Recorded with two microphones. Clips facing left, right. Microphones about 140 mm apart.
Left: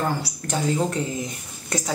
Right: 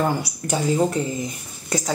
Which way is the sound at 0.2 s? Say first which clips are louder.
Right 2 dB; 5° right (ahead or behind).